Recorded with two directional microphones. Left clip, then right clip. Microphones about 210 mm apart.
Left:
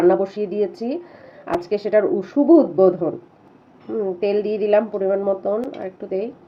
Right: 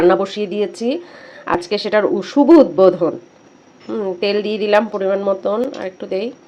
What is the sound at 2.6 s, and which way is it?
Speech, 10° right (ahead or behind).